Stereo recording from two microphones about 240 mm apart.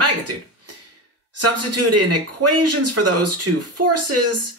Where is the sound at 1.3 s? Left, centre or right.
Right.